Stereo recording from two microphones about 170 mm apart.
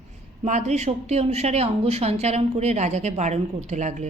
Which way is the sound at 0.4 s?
40° right (ahead or behind).